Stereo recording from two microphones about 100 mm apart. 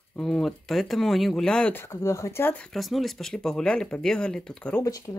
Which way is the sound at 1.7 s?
25° left (ahead or behind).